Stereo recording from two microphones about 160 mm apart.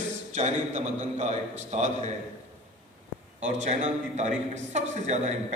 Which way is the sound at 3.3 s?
45° right (ahead or behind).